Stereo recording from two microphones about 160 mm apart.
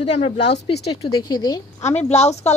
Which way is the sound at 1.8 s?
45° left (ahead or behind).